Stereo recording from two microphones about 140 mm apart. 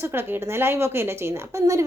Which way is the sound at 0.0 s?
15° right (ahead or behind).